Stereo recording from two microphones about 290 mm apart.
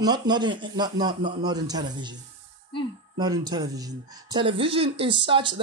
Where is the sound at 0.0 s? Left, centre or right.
Centre.